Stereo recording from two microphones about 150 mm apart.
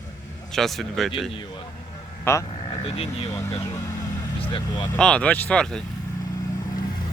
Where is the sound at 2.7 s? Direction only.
40° left (ahead or behind).